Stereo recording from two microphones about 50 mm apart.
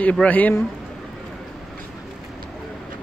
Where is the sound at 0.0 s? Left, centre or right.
Left.